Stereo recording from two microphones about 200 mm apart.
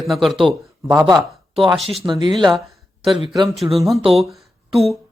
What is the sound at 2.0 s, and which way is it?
Speech, 20° right (ahead or behind).